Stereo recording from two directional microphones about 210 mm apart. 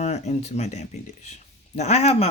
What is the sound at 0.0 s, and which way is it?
Speech, 30° left (ahead or behind).